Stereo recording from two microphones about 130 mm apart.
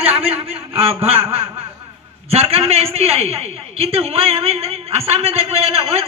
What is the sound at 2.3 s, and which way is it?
A man's voice, 50° right (ahead or behind).